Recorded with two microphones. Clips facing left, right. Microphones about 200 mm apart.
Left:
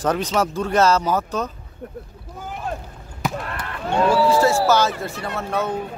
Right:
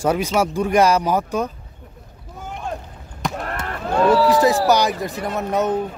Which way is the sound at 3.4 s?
45° right (ahead or behind).